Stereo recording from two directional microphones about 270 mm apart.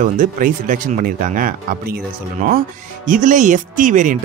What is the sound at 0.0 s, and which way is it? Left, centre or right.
Speech, right.